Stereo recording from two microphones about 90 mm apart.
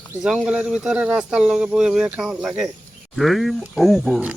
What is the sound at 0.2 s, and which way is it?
Speech, 5° right (ahead or behind).